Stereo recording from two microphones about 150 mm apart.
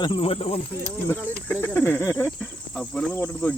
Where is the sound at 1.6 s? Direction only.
15° left (ahead or behind).